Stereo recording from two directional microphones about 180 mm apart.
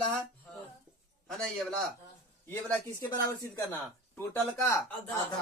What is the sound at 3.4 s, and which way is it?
Speech, 15° left (ahead or behind).